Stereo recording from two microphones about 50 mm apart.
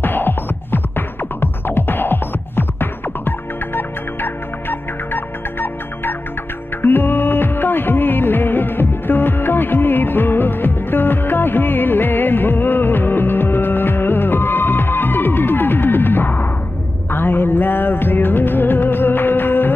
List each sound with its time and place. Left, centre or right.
0.0 s music: left